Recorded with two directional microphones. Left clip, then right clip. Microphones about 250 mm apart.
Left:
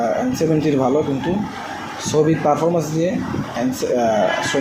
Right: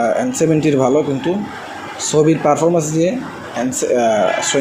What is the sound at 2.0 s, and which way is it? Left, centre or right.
Speech, right.